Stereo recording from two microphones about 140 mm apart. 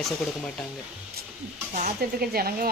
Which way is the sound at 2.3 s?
90° right.